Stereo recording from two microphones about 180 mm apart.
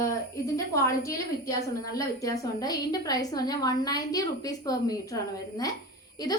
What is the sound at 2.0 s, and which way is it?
A woman's voice, 20° left (ahead or behind).